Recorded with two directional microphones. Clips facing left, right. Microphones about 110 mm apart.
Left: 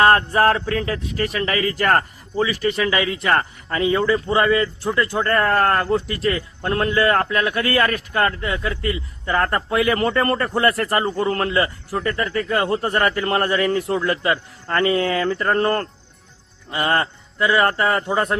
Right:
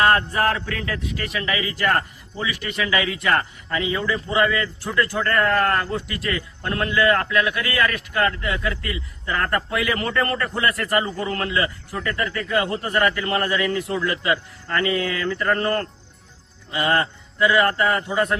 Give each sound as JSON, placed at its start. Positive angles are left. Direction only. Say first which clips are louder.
{"t": 0.0, "sound": "a man's voice", "louder": "left 4 dB", "side_deg": 35}